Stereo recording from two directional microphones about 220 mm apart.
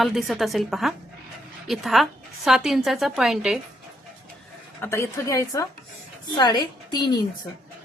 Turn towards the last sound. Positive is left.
turn(degrees=20)  # may be behind; listen again after turning